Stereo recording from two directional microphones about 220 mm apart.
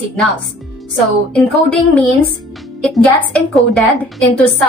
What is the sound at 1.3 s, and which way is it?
A woman's voice, 5° left (ahead or behind).